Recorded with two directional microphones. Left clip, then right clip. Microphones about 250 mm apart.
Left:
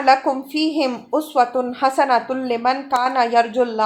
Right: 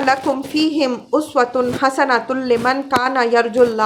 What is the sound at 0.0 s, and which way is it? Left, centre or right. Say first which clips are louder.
A woman's voice: left 1 dB; centre.